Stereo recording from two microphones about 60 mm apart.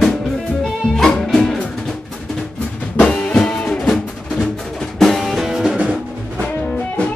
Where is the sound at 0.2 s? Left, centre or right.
Centre.